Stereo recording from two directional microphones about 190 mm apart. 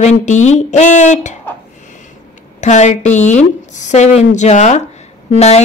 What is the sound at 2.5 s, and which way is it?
Speech, 40° left (ahead or behind).